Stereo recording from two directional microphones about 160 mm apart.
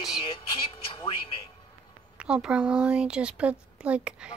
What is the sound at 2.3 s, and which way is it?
Speech, 5° right (ahead or behind).